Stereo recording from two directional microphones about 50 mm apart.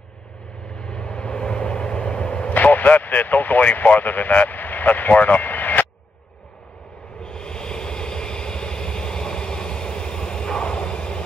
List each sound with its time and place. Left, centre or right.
0.7 s vehicle: centre
2.5 s speech: left
7.2 s vehicle: centre